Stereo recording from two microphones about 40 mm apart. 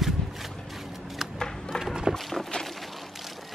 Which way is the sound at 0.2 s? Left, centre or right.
Centre.